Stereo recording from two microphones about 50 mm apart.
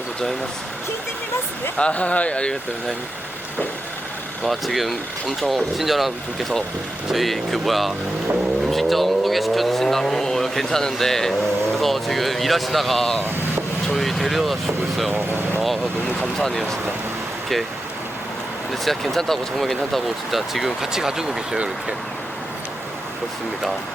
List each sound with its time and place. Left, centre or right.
1.7 s speech: left
4.4 s speech: centre
15.5 s speech: centre
18.7 s speech: centre